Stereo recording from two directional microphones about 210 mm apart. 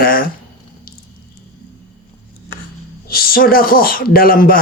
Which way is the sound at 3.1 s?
45° left (ahead or behind).